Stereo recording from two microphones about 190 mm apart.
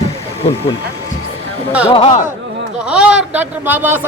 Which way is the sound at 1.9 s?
30° left (ahead or behind).